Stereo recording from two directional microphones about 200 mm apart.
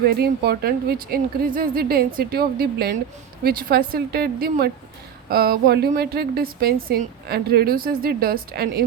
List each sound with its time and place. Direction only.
0.0 s a woman's voice: 50° right (ahead or behind)